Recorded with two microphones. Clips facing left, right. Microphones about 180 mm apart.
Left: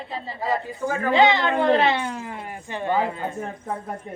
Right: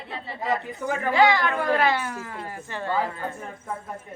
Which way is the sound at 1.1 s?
20° left (ahead or behind).